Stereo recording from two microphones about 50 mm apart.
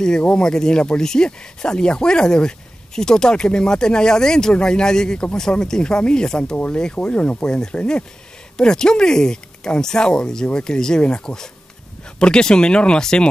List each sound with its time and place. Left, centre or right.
0.2 s speech: centre
6.5 s speech: left
7.4 s speech: centre